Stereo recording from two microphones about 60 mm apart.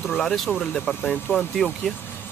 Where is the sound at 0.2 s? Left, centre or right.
Centre.